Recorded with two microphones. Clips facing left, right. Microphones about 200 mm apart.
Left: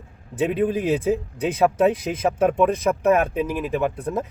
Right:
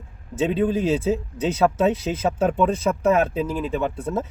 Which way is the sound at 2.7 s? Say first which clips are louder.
Left 1 dB; 15° left (ahead or behind).